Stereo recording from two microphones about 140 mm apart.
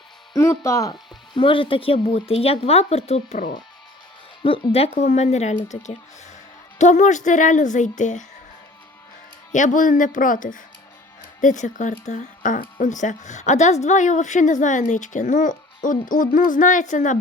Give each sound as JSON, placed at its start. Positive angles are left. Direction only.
{"t": 0.3, "sound": "speech", "side_deg": 20}
{"t": 1.3, "sound": "speech", "side_deg": 35}
{"t": 4.4, "sound": "speech", "side_deg": 40}
{"t": 9.5, "sound": "speech", "side_deg": 65}
{"t": 11.3, "sound": "speech", "side_deg": 60}